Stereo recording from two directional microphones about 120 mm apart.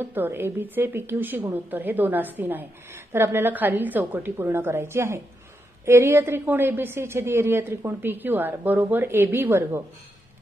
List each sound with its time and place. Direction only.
0.0 s a woman's voice: 15° right (ahead or behind)